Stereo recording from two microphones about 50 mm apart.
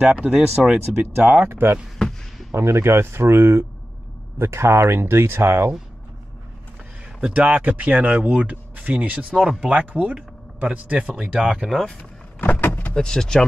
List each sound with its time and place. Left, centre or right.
0.0 s speech: right
0.9 s speech: right
1.5 s speech: right
7.3 s speech: right
11.5 s speech: centre
12.0 s vehicle: left
12.9 s speech: centre